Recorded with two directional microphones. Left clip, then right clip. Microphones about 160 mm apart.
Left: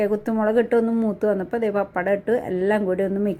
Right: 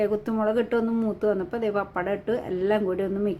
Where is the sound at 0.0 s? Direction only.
25° left (ahead or behind).